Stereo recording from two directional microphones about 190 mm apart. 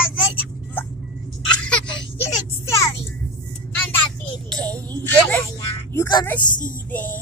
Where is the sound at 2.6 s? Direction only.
15° left (ahead or behind).